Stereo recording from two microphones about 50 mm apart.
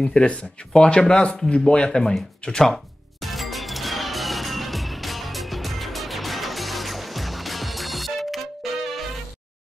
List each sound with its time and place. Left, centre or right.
0.0 s speech: centre
3.2 s music: centre